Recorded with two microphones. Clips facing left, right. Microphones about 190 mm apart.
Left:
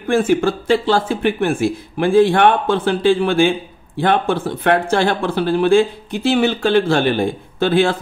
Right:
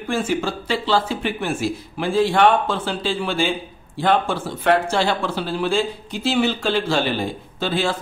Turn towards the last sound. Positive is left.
turn(degrees=55)  # may be behind; listen again after turning